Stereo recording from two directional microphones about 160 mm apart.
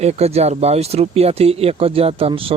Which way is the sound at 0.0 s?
40° right (ahead or behind).